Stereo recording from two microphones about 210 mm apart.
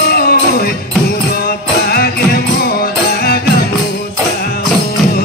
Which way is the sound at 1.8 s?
50° left (ahead or behind).